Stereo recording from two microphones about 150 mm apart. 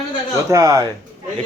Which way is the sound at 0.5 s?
20° right (ahead or behind).